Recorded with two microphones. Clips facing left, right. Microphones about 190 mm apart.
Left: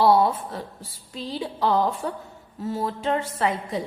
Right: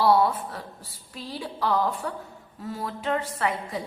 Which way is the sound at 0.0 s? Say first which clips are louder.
Left 2 dB; 25° left (ahead or behind).